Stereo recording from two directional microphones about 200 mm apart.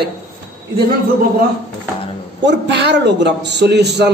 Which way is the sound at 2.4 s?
60° right (ahead or behind).